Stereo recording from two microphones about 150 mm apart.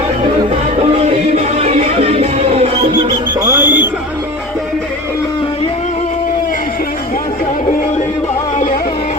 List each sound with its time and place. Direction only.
1.4 s music: 45° right (ahead or behind)
3.4 s music: 15° right (ahead or behind)